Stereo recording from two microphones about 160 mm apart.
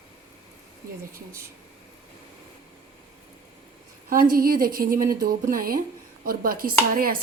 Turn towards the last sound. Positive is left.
turn(degrees=-65)  # may be behind; listen again after turning